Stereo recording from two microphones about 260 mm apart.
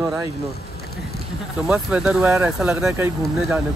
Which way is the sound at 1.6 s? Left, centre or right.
Centre.